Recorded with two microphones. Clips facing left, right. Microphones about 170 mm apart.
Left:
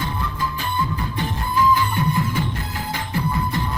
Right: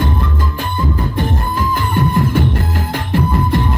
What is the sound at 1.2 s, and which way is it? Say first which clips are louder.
Music: left 1 dB; 55° right (ahead or behind).